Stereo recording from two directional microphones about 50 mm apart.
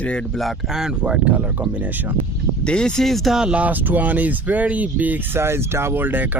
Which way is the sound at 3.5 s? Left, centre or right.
Right.